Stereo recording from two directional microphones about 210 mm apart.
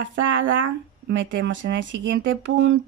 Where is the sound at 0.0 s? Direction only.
65° right (ahead or behind).